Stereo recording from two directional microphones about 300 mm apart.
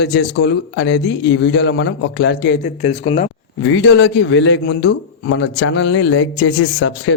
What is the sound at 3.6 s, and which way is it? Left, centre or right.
Speech, left.